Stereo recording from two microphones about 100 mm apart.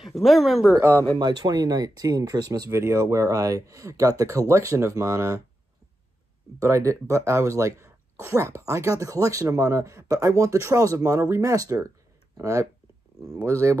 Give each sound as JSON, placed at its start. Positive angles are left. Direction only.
{"t": 0.0, "sound": "speech", "side_deg": 0}
{"t": 0.7, "sound": "speech", "side_deg": -30}
{"t": 1.1, "sound": "speech", "side_deg": -40}
{"t": 6.6, "sound": "speech", "side_deg": -30}